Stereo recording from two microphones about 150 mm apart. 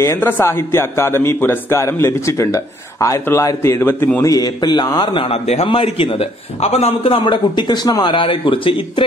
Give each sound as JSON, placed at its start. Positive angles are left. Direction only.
{"t": 0.0, "sound": "a man's voice", "side_deg": 15}